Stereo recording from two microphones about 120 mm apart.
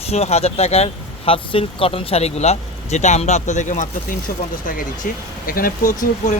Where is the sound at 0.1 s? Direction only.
60° left (ahead or behind); by 3.8 s 90° left.